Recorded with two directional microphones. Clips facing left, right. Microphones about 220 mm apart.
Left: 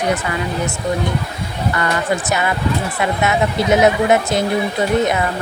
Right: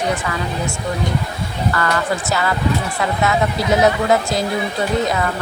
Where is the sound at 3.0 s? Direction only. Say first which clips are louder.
Left 1 dB; 20° left (ahead or behind).